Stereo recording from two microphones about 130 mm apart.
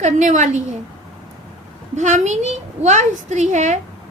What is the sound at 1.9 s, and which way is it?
A woman's voice, 65° right (ahead or behind).